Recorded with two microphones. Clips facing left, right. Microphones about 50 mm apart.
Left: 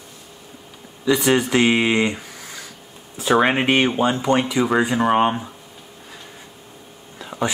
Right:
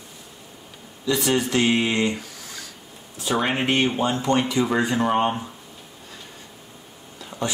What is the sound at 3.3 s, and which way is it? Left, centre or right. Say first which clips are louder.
Speech: left 5 dB; left.